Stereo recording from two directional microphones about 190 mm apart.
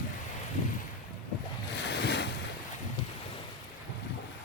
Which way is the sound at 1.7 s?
65° left (ahead or behind).